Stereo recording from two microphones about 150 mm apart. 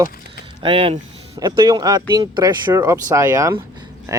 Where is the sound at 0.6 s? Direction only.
40° right (ahead or behind).